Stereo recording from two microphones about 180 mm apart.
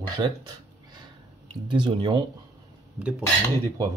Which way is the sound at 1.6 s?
25° right (ahead or behind).